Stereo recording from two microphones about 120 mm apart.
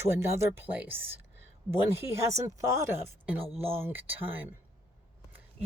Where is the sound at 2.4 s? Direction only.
25° right (ahead or behind).